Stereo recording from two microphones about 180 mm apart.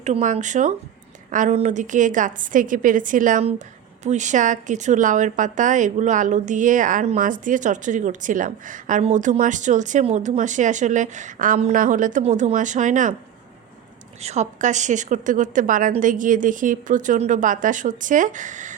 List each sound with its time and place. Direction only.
0.0 s a woman's voice: 40° right (ahead or behind)
14.2 s a woman's voice: 40° right (ahead or behind)